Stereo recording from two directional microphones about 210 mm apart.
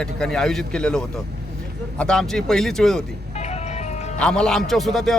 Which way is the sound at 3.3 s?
30° left (ahead or behind).